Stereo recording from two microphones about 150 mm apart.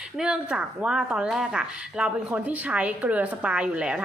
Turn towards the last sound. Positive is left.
turn(degrees=-5)  # may be behind; listen again after turning